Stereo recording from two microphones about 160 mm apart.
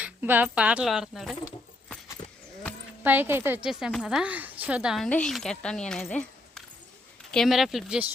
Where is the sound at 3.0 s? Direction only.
15° right (ahead or behind).